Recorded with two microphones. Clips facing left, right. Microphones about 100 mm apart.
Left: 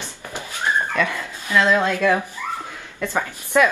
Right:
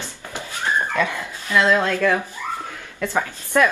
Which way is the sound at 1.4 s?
15° left (ahead or behind).